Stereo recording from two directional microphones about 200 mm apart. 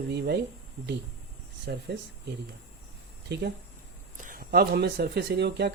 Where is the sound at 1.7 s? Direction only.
50° right (ahead or behind).